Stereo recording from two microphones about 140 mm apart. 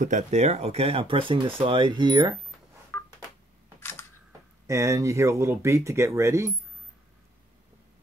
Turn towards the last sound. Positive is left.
turn(degrees=-20)  # may be behind; listen again after turning